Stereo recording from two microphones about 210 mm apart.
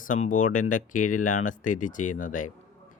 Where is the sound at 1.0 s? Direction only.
90° left.